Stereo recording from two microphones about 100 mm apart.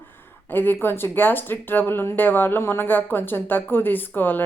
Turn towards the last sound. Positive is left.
turn(degrees=20)  # may be behind; listen again after turning